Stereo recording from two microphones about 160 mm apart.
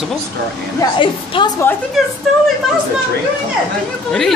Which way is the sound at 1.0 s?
30° left (ahead or behind).